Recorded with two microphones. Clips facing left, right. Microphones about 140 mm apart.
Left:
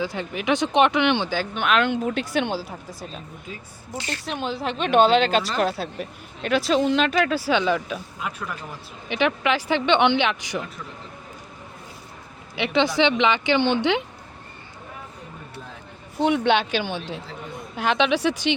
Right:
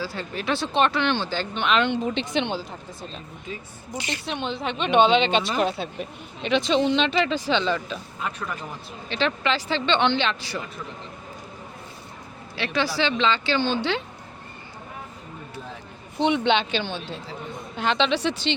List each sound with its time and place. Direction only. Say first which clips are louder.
0.0 s speech: left 3 dB; 15° left (ahead or behind)
3.9 s a woman's voice: even; 15° right (ahead or behind)
4.3 s speech: left 2 dB; 5° left (ahead or behind)
12.5 s a woman's voice: left 4 dB; 20° left (ahead or behind)
16.1 s speech: left 1 dB; 5° left (ahead or behind)